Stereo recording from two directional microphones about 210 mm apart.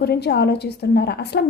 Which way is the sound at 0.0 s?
50° left (ahead or behind).